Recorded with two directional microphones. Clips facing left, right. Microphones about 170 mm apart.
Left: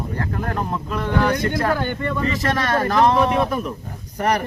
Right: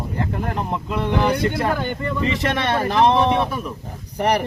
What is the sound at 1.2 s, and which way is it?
Speech, 10° right (ahead or behind).